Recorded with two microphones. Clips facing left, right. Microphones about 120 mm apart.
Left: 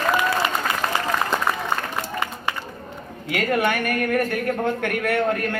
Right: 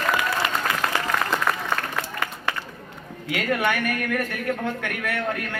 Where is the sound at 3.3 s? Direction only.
45° left (ahead or behind).